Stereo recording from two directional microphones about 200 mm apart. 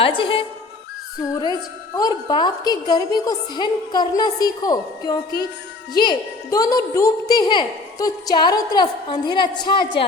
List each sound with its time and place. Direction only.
0.0 s a woman's voice: 25° left (ahead or behind)
2.0 s a woman's voice: 20° left (ahead or behind)